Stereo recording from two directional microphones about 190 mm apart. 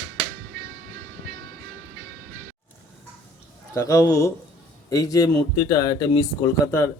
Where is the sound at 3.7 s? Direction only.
20° left (ahead or behind).